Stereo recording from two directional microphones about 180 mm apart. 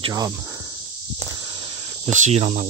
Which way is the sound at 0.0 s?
20° right (ahead or behind).